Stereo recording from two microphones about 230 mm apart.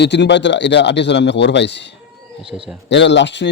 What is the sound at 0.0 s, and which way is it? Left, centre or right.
Speech, left.